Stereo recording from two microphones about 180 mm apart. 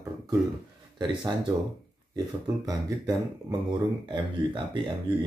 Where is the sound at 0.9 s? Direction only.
25° right (ahead or behind).